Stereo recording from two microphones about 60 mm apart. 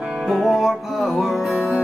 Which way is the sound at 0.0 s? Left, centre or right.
Centre.